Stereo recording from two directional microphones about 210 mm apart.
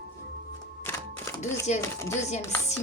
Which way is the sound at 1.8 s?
15° left (ahead or behind).